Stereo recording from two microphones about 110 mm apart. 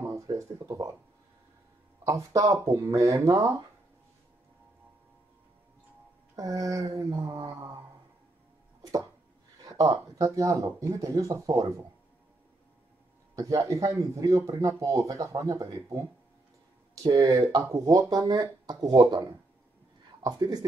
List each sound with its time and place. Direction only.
0.0 s a sound: 25° right (ahead or behind)
2.0 s speech: 30° right (ahead or behind)
6.3 s speech: 30° right (ahead or behind)
9.7 s speech: 30° right (ahead or behind)
13.4 s speech: 30° right (ahead or behind)
20.2 s speech: 35° right (ahead or behind)